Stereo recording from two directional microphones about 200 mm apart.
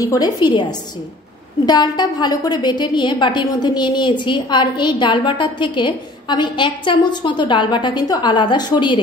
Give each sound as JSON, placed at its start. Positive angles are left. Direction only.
{"t": 0.0, "sound": "a woman's voice", "side_deg": 20}